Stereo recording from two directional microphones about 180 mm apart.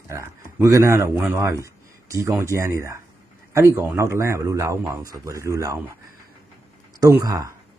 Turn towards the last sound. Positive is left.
turn(degrees=-20)  # may be behind; listen again after turning